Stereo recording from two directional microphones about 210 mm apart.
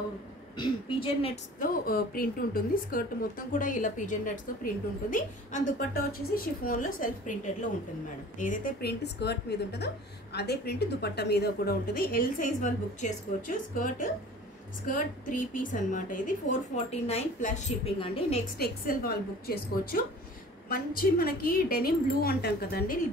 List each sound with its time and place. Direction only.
0.6 s a woman's voice: 25° left (ahead or behind)
1.6 s a woman's voice: 45° left (ahead or behind); by 18.4 s 25° left (ahead or behind)
18.6 s a woman's voice: 45° left (ahead or behind)